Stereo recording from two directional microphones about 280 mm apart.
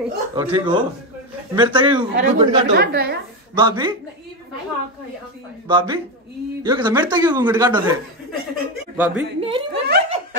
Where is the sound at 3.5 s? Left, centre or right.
Centre.